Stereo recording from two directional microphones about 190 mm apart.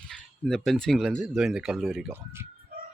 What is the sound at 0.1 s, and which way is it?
Speech, 5° left (ahead or behind).